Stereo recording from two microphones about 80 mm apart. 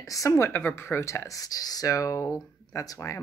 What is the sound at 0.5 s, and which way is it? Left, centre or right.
Speech, left.